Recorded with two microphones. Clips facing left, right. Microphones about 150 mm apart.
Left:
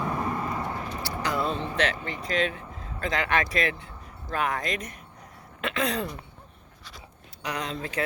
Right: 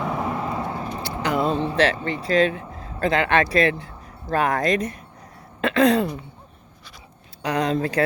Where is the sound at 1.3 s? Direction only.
20° right (ahead or behind).